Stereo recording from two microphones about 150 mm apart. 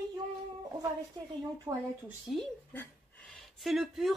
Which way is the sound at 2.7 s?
10° left (ahead or behind).